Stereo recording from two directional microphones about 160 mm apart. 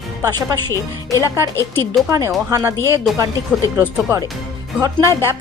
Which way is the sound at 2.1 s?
20° right (ahead or behind).